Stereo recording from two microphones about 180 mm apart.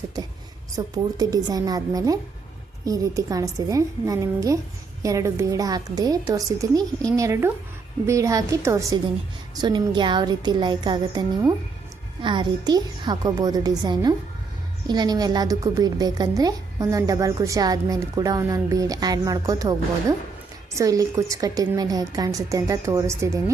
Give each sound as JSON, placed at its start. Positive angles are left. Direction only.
{"t": 0.8, "sound": "a woman's voice", "side_deg": -20}